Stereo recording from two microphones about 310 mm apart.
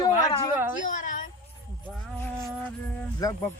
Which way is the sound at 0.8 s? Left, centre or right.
Left.